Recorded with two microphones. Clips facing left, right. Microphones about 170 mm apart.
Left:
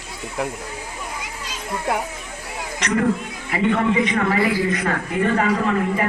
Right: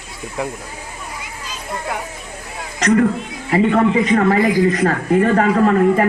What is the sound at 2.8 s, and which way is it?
A man's voice, 40° right (ahead or behind).